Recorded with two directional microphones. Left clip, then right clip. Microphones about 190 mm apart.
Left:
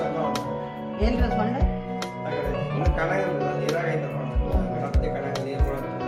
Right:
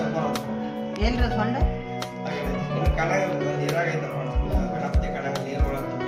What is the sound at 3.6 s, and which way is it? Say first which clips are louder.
Music: right 1 dB; centre (ahead or behind).